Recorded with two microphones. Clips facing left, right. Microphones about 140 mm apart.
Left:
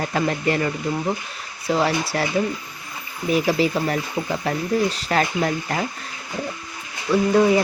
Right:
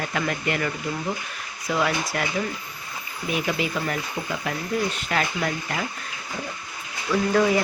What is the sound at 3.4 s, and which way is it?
Speech, 35° left (ahead or behind).